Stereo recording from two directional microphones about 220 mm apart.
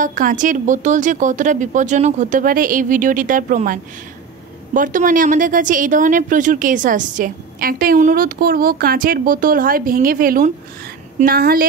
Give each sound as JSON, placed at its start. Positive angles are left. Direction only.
{"t": 0.0, "sound": "a woman's voice", "side_deg": -35}